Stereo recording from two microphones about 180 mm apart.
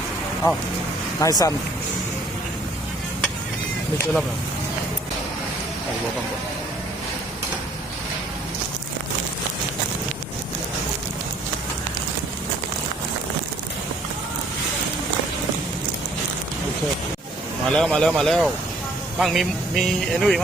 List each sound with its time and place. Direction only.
1.2 s speech: 20° left (ahead or behind)
17.7 s speech: 5° left (ahead or behind)